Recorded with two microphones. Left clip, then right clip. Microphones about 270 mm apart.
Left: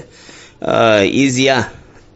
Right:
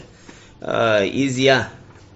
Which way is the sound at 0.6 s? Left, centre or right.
Left.